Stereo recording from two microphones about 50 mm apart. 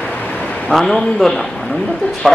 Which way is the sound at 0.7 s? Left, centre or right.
Centre.